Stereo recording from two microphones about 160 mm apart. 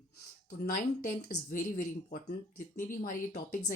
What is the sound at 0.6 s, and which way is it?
Speech, 60° left (ahead or behind).